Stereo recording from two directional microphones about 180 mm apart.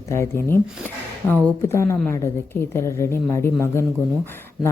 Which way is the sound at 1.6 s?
15° left (ahead or behind).